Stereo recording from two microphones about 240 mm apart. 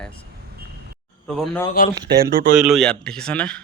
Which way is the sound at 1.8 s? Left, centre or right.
Left.